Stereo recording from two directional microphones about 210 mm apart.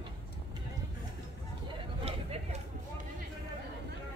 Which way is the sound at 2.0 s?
30° right (ahead or behind).